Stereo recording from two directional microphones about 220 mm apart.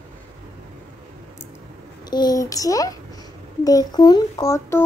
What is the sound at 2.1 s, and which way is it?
A child's voice, 20° left (ahead or behind).